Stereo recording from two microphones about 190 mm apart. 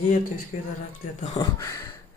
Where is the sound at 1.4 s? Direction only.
20° left (ahead or behind).